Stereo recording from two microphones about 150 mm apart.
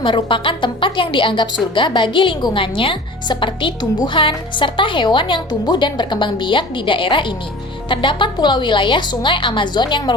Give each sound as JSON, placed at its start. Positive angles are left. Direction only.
{"t": 0.0, "sound": "a woman's voice", "side_deg": 35}